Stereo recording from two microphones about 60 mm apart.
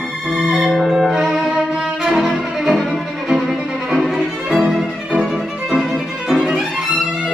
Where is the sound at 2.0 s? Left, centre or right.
Centre.